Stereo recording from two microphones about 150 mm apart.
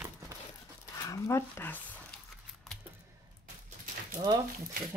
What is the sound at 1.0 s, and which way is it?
Speech, 20° left (ahead or behind).